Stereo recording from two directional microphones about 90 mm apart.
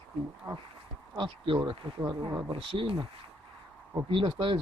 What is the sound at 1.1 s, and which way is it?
Speech, 70° right (ahead or behind).